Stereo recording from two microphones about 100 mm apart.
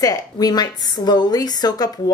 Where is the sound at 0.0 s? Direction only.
40° left (ahead or behind).